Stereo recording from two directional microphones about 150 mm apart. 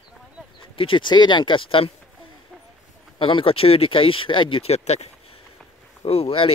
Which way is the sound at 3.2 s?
35° left (ahead or behind).